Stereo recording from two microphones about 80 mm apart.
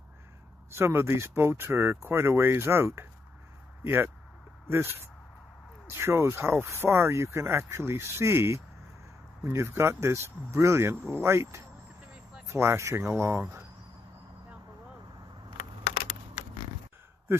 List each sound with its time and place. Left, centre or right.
0.7 s speech: right